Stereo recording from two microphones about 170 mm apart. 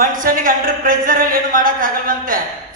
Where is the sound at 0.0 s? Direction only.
55° right (ahead or behind).